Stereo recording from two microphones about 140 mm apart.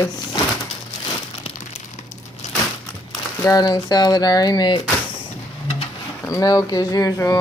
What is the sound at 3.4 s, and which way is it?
Speech, 25° left (ahead or behind).